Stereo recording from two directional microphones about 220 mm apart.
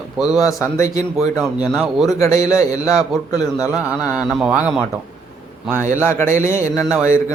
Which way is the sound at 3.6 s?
5° right (ahead or behind).